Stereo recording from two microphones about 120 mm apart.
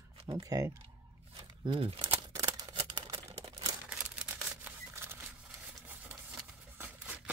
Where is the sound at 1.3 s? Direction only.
45° right (ahead or behind).